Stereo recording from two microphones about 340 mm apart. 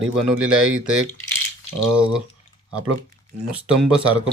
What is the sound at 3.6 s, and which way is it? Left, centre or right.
Speech, centre.